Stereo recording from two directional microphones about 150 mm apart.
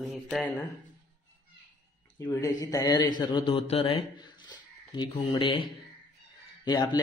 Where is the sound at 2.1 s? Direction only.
20° left (ahead or behind).